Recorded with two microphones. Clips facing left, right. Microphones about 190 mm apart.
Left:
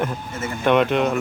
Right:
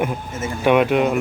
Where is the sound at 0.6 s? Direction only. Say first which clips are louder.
Right 2 dB; 10° right (ahead or behind).